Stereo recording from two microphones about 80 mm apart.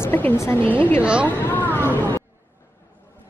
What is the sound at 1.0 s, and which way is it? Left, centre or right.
Speech, centre.